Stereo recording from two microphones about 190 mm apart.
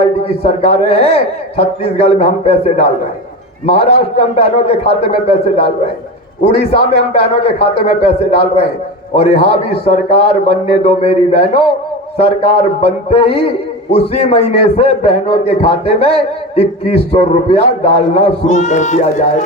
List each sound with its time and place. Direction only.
0.0 s a man's voice: 30° left (ahead or behind)